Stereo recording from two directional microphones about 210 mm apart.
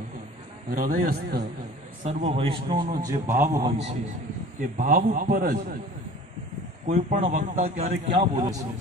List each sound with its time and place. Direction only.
0.7 s a man's voice: 40° right (ahead or behind)
2.0 s a man's voice: 30° right (ahead or behind)
3.1 s a man's voice: 15° right (ahead or behind)
4.6 s a man's voice: 40° right (ahead or behind)
6.9 s a man's voice: 30° right (ahead or behind)
8.4 s a man's voice: 20° right (ahead or behind)